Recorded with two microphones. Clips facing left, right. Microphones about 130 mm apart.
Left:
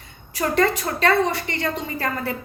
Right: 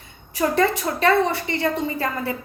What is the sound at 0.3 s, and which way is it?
Speech, 25° right (ahead or behind).